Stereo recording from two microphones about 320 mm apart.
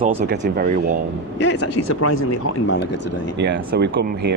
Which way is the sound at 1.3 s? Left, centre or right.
Left.